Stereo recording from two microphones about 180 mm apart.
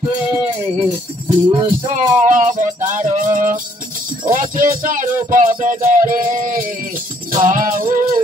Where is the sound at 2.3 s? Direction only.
45° right (ahead or behind).